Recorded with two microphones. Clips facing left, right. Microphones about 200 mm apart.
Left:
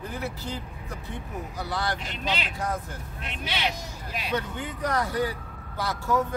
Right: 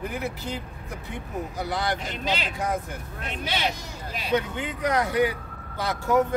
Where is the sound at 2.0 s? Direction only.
40° right (ahead or behind).